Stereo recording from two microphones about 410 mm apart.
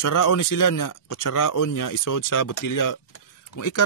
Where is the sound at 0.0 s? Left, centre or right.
Left.